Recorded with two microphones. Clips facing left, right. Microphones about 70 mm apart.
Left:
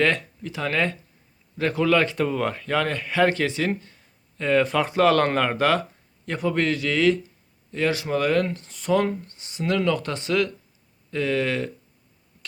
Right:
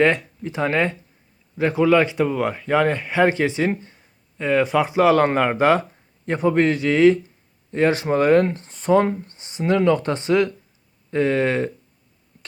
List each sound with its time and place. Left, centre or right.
0.0 s speech: right